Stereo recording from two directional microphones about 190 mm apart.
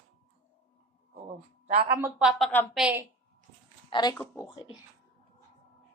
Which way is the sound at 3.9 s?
20° left (ahead or behind).